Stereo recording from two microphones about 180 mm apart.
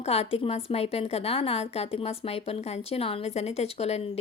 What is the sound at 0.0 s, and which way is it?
A woman's voice, 35° left (ahead or behind).